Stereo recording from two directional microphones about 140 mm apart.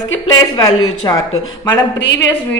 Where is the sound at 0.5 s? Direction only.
30° left (ahead or behind).